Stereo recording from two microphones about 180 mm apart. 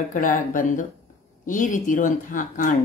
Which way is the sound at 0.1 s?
45° left (ahead or behind).